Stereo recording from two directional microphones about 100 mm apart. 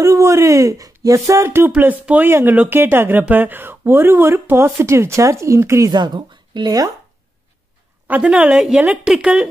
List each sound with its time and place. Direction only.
0.0 s speech: 30° right (ahead or behind)
5.9 s speech: 50° right (ahead or behind)
8.1 s a woman's voice: 10° right (ahead or behind)